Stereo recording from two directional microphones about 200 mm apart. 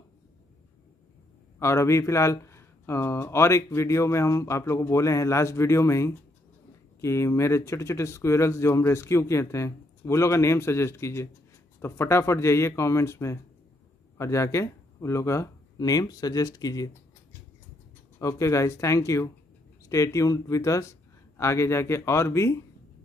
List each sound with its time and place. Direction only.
1.6 s speech: 15° left (ahead or behind)
18.2 s speech: 15° left (ahead or behind)